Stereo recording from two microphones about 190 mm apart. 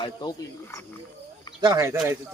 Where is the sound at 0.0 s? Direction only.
20° left (ahead or behind).